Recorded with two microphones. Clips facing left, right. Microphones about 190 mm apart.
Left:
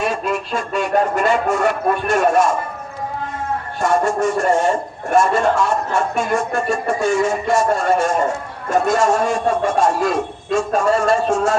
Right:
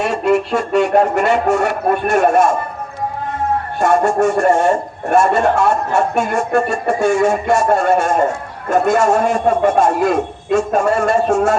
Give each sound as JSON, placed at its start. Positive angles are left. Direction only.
{"t": 0.0, "sound": "speech", "side_deg": -70}
{"t": 3.8, "sound": "speech", "side_deg": -60}